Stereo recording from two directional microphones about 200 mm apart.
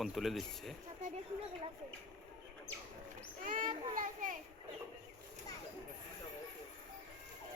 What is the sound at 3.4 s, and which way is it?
Child singing, 40° right (ahead or behind).